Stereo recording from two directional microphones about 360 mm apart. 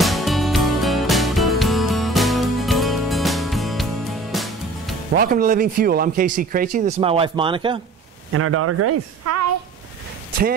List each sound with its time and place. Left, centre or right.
0.0 s music: centre
5.1 s speech: right
8.3 s speech: right